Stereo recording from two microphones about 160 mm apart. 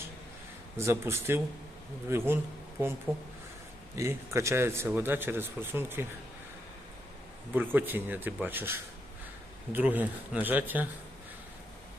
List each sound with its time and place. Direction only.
0.8 s a man's voice: 15° right (ahead or behind)
3.9 s a man's voice: 15° right (ahead or behind)
7.5 s a man's voice: 10° right (ahead or behind)